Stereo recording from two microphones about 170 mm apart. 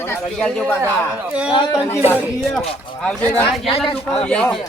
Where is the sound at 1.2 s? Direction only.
5° right (ahead or behind).